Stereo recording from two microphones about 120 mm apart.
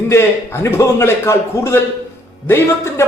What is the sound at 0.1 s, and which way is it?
A man's voice, 20° left (ahead or behind).